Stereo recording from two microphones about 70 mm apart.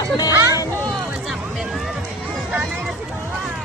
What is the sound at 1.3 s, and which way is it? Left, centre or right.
Music, centre.